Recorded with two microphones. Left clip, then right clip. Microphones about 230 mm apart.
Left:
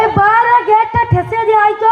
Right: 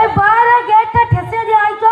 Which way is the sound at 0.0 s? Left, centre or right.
Left.